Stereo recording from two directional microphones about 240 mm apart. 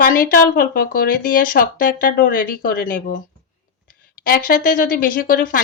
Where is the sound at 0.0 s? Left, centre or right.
Left.